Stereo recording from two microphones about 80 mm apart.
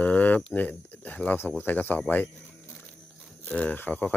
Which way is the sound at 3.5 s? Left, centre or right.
Centre.